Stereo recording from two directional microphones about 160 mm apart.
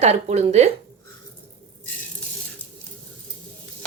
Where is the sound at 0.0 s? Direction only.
45° right (ahead or behind).